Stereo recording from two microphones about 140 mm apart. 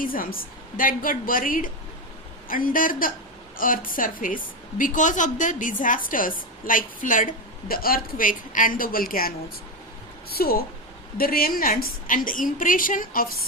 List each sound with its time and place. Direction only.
0.0 s a woman's voice: 90° left; by 7.3 s 70° left (ahead or behind)
7.7 s a woman's voice: 90° left